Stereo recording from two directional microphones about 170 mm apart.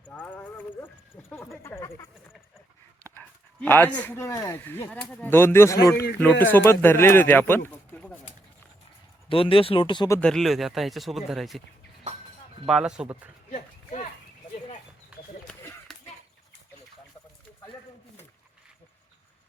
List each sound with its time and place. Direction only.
0.1 s horse: 10° left (ahead or behind)
1.6 s speech: 15° left (ahead or behind)
9.3 s speech: 30° left (ahead or behind)
10.1 s speech: 5° left (ahead or behind)
12.6 s speech: 5° right (ahead or behind)
13.5 s a sound: 40° left (ahead or behind)
15.9 s a sound: centre (ahead or behind)